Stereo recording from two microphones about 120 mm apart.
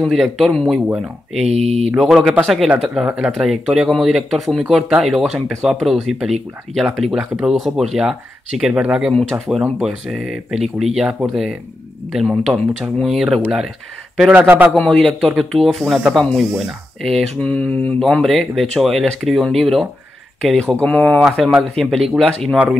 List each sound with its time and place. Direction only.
0.0 s speech: centre (ahead or behind)
1.4 s speech: 60° right (ahead or behind)
1.9 s speech: 5° right (ahead or behind)
14.3 s speech: 15° right (ahead or behind)
15.0 s speech: centre (ahead or behind)
17.4 s mantra: 10° left (ahead or behind)
18.0 s speech: centre (ahead or behind)